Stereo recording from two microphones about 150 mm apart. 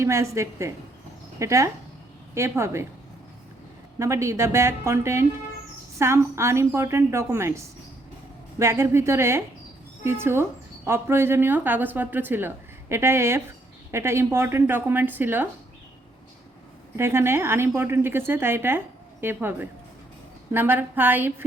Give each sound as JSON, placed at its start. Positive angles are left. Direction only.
{"t": 0.0, "sound": "a woman's voice", "side_deg": -20}
{"t": 3.9, "sound": "a woman's voice", "side_deg": -20}
{"t": 17.0, "sound": "speech", "side_deg": -15}